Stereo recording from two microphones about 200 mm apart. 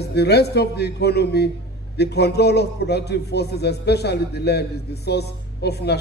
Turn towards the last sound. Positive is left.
turn(degrees=55)  # may be behind; listen again after turning